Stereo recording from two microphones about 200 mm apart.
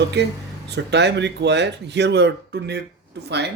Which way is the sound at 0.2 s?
55° right (ahead or behind).